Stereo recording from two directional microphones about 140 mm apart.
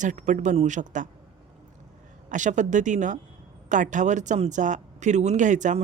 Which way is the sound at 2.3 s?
60° right (ahead or behind).